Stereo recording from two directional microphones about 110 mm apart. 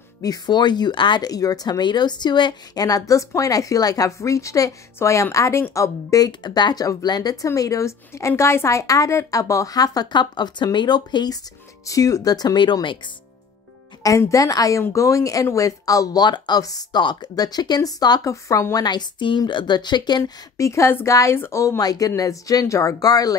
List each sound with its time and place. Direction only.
0.2 s speech: 40° left (ahead or behind)
11.8 s speech: 30° left (ahead or behind)
14.0 s speech: 30° left (ahead or behind)
18.9 s speech: 45° left (ahead or behind)
20.5 s speech: 25° left (ahead or behind)